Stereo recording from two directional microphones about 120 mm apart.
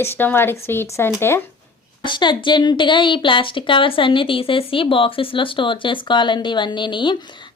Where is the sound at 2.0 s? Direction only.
40° left (ahead or behind).